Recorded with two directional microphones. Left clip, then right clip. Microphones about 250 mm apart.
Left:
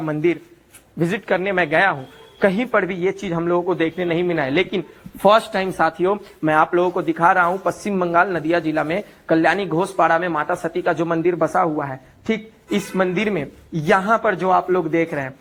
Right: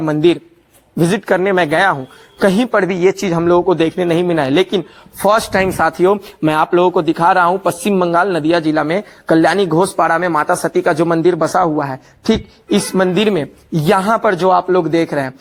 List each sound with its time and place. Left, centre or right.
0.0 s a man's voice: right